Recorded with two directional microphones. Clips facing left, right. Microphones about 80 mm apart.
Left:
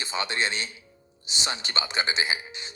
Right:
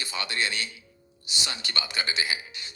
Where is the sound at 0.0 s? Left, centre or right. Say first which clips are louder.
Left 2 dB; left.